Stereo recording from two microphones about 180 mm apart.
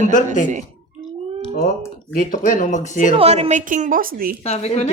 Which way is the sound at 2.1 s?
45° left (ahead or behind).